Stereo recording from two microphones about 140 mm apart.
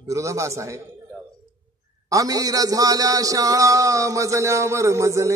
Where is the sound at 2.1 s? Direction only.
25° right (ahead or behind).